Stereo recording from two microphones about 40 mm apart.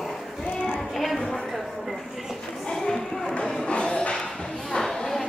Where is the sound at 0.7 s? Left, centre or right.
Centre.